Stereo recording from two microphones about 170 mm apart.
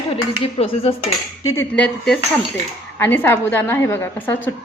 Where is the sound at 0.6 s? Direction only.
35° left (ahead or behind).